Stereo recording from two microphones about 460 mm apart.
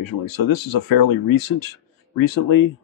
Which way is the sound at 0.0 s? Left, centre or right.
Left.